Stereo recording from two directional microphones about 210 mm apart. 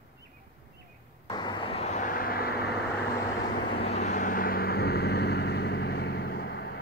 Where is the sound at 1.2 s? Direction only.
20° left (ahead or behind); by 2.7 s 50° left (ahead or behind).